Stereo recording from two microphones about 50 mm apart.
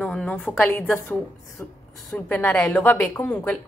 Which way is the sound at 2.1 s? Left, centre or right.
Left.